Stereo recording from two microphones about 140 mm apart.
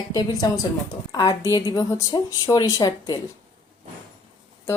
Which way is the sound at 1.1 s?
25° left (ahead or behind).